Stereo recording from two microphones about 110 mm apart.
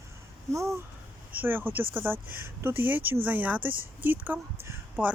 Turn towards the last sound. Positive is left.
turn(degrees=-20)  # may be behind; listen again after turning